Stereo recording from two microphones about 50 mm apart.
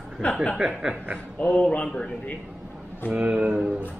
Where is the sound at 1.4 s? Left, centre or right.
Left.